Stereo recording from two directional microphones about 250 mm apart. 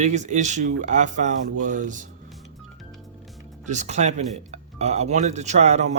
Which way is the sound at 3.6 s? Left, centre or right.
Right.